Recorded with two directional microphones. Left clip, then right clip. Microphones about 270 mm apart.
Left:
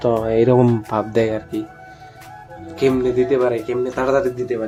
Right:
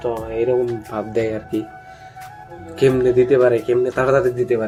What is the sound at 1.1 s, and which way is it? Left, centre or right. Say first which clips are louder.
Speech: left 1 dB; centre.